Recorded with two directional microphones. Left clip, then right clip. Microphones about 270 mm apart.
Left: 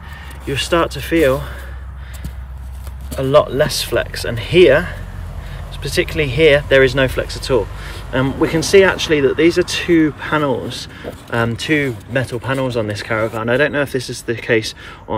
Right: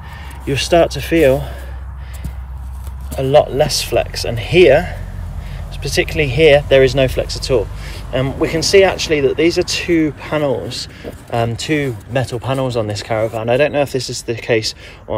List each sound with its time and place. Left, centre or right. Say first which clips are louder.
0.5 s speech: right 4 dB; centre
3.1 s speech: right 1 dB; centre